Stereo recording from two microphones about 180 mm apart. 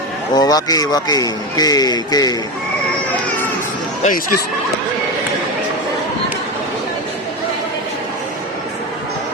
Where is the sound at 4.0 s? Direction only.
45° left (ahead or behind).